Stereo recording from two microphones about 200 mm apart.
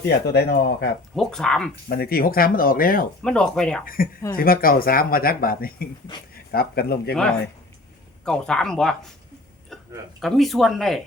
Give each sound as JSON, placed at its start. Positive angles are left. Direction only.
{"t": 0.0, "sound": "speech", "side_deg": 55}
{"t": 1.1, "sound": "speech", "side_deg": 0}
{"t": 1.9, "sound": "speech", "side_deg": 50}
{"t": 3.2, "sound": "speech", "side_deg": 5}
{"t": 3.8, "sound": "speech", "side_deg": 45}
{"t": 7.1, "sound": "speech", "side_deg": 5}
{"t": 10.2, "sound": "speech", "side_deg": 0}